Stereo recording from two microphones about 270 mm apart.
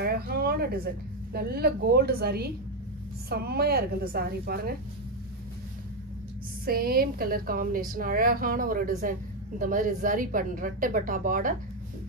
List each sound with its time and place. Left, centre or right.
0.0 s a woman's voice: right
6.6 s a woman's voice: right